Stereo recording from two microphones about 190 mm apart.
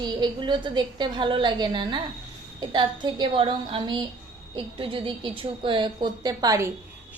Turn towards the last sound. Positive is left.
turn(degrees=-20)  # may be behind; listen again after turning